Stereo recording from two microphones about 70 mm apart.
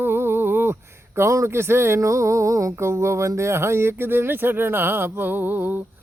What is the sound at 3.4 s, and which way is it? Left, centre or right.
Speech, right.